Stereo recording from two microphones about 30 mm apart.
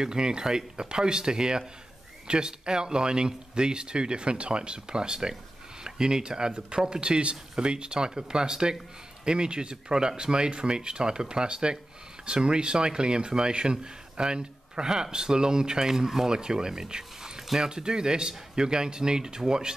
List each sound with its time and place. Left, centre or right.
0.0 s speech: right